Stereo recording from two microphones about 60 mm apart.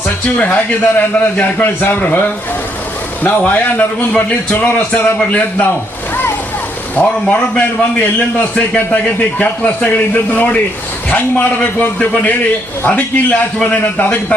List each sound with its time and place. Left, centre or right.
0.3 s a man's voice: left
6.9 s a man's voice: left